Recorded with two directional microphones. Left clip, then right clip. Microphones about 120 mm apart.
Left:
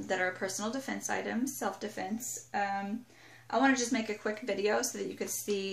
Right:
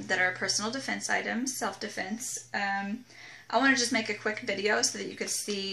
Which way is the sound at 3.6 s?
15° left (ahead or behind).